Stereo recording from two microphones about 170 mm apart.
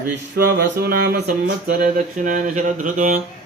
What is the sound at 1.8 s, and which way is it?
Mantra, 50° right (ahead or behind).